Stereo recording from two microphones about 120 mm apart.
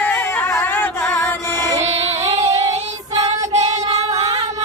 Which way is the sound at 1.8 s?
65° right (ahead or behind).